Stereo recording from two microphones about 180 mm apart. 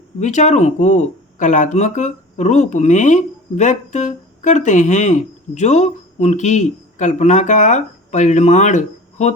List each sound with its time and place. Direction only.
0.2 s speech: 40° left (ahead or behind)